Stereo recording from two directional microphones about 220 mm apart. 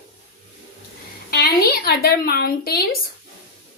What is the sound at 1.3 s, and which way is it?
A woman's voice, 45° left (ahead or behind).